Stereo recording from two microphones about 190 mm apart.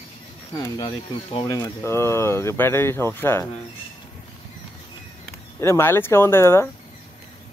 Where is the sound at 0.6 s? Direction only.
20° left (ahead or behind).